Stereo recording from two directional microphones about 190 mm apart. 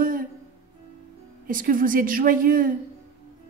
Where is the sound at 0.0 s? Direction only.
45° right (ahead or behind).